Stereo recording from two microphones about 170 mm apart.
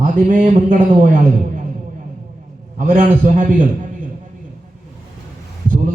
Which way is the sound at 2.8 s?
55° right (ahead or behind).